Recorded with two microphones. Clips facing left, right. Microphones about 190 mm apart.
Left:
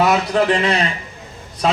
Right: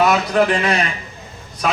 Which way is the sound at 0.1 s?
25° left (ahead or behind).